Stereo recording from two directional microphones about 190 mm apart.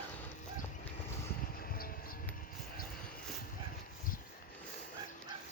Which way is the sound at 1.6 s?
50° left (ahead or behind).